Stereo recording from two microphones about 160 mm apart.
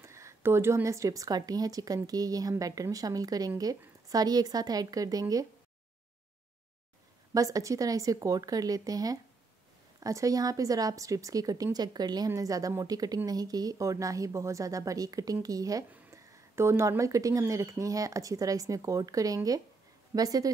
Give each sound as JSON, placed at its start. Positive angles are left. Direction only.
{"t": 0.0, "sound": "speech", "side_deg": -15}
{"t": 7.3, "sound": "speech", "side_deg": -20}